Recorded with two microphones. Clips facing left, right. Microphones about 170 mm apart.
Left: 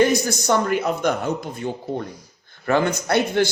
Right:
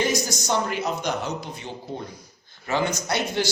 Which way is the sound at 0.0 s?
55° left (ahead or behind).